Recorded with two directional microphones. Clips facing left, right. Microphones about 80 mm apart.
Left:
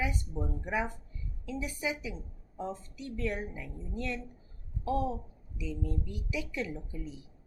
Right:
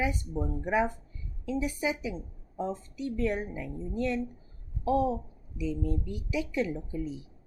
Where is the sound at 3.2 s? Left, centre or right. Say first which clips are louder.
Right 4 dB; right.